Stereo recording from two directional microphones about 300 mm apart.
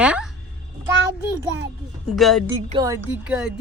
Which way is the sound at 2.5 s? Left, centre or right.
Centre.